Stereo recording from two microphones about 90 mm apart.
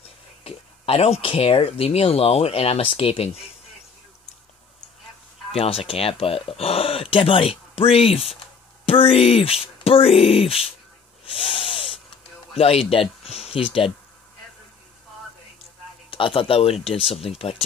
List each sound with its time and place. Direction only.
0.4 s speech: 90° left
5.5 s speech: 90° left
11.2 s snort: 85° left
12.5 s speech: 90° left
16.1 s a man's voice: 70° left (ahead or behind); by 17.6 s 90° left